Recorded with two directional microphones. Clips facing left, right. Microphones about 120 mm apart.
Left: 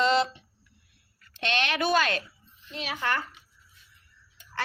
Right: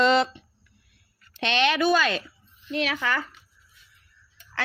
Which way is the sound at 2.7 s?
90° right.